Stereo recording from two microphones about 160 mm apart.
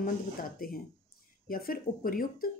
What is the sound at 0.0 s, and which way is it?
Speech, 65° left (ahead or behind).